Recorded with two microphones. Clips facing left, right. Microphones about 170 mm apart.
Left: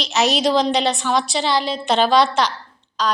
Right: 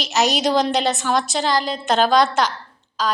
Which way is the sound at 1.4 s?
45° right (ahead or behind).